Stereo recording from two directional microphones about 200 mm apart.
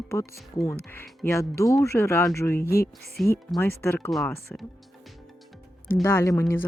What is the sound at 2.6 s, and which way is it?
Speech, 50° left (ahead or behind).